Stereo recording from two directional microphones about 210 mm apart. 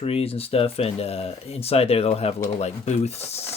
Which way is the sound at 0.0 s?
25° left (ahead or behind).